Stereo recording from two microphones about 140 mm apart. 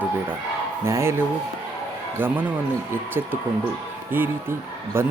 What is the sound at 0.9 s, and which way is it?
A man's voice, 20° right (ahead or behind).